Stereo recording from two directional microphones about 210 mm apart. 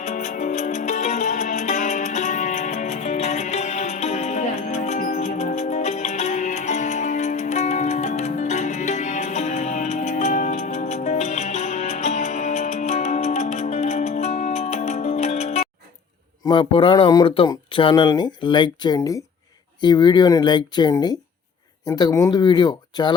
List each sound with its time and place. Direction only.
0.0 s music: 35° left (ahead or behind)
16.5 s speech: 25° left (ahead or behind)